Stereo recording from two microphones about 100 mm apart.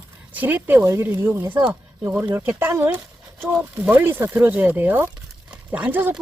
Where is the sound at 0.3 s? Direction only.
15° right (ahead or behind).